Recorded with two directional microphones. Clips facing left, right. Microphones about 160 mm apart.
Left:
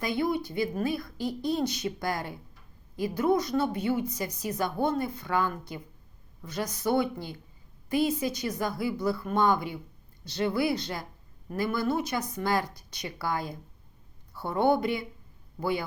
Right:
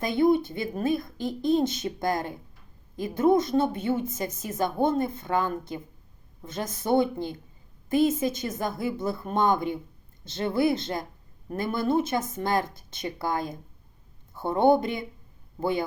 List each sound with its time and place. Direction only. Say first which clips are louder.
0.0 s a woman's voice: right 6 dB; 25° right (ahead or behind)